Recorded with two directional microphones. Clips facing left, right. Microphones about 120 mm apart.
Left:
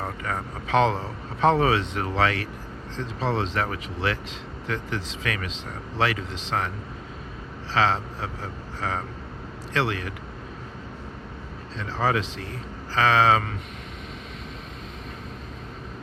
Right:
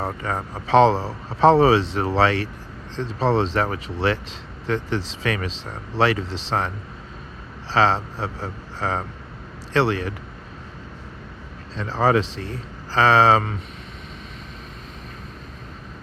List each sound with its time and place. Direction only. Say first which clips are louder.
0.0 s speech: right 4 dB; 30° right (ahead or behind)
7.7 s speech: right 4 dB; 35° right (ahead or behind)
11.8 s speech: right 6 dB; 40° right (ahead or behind)